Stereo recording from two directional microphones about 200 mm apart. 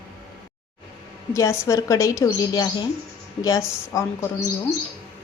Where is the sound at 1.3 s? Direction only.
15° left (ahead or behind).